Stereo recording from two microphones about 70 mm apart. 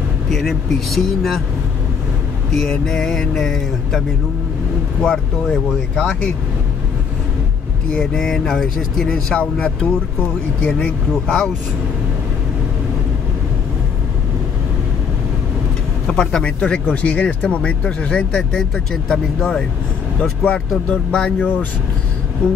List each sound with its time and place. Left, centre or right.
0.3 s speech: centre
2.5 s speech: centre
5.0 s speech: centre
7.9 s speech: centre
16.1 s speech: centre